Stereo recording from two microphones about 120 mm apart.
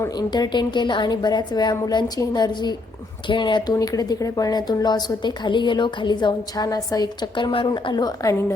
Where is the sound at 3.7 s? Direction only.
30° left (ahead or behind).